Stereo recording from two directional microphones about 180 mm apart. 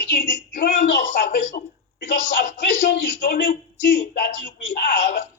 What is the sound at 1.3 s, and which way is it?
Speech, 45° left (ahead or behind).